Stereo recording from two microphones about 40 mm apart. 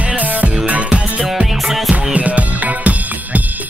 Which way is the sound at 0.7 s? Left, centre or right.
Right.